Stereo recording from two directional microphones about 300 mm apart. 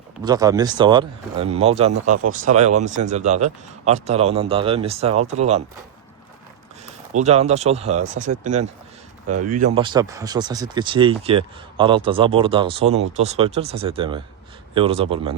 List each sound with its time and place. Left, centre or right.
0.2 s speech: centre
6.8 s speech: right
9.7 s speech: centre